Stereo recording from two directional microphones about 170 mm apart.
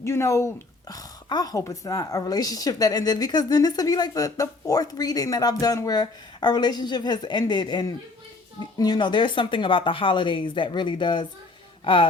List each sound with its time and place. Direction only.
0.0 s speech: 15° left (ahead or behind)